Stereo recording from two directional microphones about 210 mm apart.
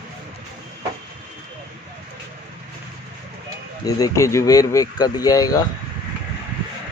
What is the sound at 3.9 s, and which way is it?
Speech, 15° left (ahead or behind).